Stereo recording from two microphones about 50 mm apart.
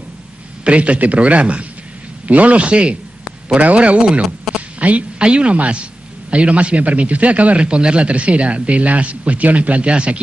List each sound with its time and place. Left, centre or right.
0.7 s speech: right